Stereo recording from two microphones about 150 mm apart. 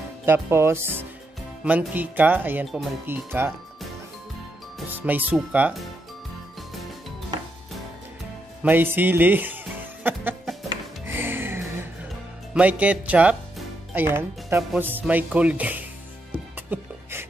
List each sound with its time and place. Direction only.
0.2 s speech: 15° right (ahead or behind)
4.8 s speech: 10° right (ahead or behind)
8.6 s speech: 15° right (ahead or behind)
11.1 s music: 15° right (ahead or behind)
12.5 s speech: 10° right (ahead or behind)
16.3 s music: 10° right (ahead or behind)